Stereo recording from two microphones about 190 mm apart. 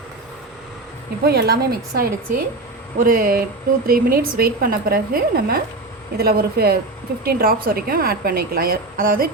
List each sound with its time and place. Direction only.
1.2 s a woman's voice: 60° right (ahead or behind)